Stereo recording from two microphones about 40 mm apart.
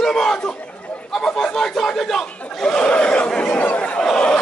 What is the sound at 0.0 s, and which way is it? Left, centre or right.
Chatter, centre.